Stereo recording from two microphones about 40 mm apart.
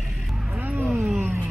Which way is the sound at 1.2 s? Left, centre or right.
Right.